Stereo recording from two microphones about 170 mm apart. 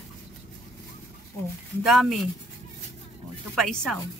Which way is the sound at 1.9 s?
Centre (ahead or behind).